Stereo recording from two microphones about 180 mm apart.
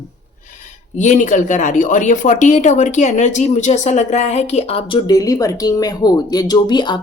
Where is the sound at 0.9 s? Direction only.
45° left (ahead or behind); by 7.0 s 25° left (ahead or behind).